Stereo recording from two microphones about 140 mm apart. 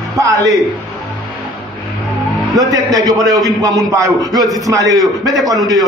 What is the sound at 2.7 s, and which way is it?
A man's voice, 25° right (ahead or behind).